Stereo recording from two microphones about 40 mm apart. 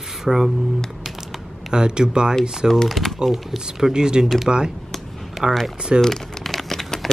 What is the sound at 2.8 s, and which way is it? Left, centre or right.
Speech, centre.